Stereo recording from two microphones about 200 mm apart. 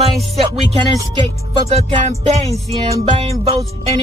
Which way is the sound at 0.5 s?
30° right (ahead or behind).